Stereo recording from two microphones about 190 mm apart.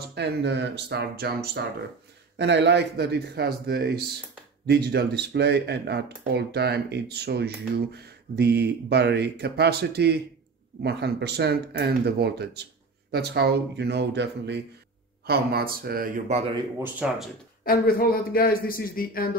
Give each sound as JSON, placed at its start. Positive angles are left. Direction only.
{"t": 0.1, "sound": "speech", "side_deg": -65}
{"t": 2.3, "sound": "speech", "side_deg": -65}
{"t": 15.2, "sound": "speech", "side_deg": -55}
{"t": 16.3, "sound": "speech", "side_deg": -35}
{"t": 16.8, "sound": "speech", "side_deg": -5}
{"t": 17.6, "sound": "a man's voice", "side_deg": 50}